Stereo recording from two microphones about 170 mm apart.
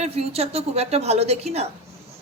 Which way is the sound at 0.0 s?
35° right (ahead or behind).